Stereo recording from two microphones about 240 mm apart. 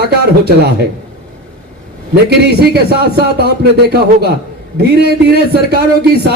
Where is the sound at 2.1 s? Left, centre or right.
Right.